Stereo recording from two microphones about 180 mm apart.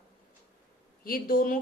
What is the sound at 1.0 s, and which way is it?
Speech, 55° left (ahead or behind).